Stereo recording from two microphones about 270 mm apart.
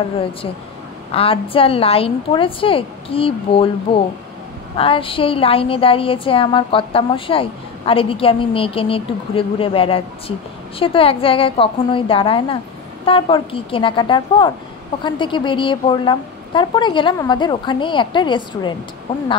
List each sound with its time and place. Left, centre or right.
1.1 s a woman's voice: centre